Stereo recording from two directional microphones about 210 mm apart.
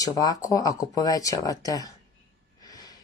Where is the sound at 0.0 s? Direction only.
15° left (ahead or behind).